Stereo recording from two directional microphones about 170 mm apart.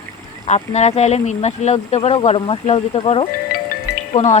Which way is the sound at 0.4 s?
40° left (ahead or behind).